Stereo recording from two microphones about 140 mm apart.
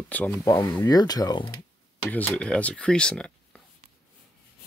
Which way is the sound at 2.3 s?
5° left (ahead or behind).